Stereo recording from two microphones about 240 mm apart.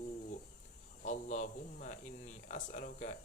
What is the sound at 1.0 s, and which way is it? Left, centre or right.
Speech, left.